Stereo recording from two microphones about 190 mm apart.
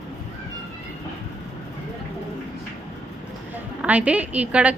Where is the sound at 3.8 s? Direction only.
5° right (ahead or behind).